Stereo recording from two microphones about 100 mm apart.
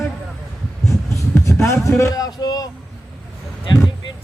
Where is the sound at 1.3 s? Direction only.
30° left (ahead or behind).